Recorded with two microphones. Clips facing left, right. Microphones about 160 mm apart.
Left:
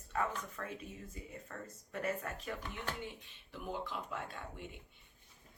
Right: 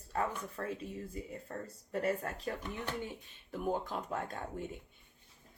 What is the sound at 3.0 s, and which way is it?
Speech, 45° right (ahead or behind).